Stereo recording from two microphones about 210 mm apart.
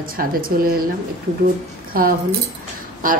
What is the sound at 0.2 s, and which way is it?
Speech, 45° right (ahead or behind).